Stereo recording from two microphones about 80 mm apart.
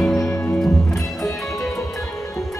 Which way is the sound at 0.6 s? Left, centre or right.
Centre.